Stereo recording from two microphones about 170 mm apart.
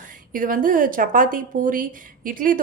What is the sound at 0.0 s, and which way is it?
Speech, 50° right (ahead or behind).